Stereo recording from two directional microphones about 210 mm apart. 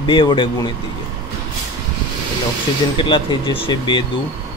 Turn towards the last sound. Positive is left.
turn(degrees=20)  # may be behind; listen again after turning